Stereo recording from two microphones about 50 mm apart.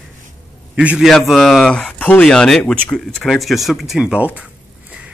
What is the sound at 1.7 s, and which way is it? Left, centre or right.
Speech, left.